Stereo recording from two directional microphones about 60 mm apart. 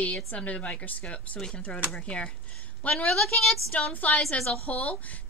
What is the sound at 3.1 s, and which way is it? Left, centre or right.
Speech, centre.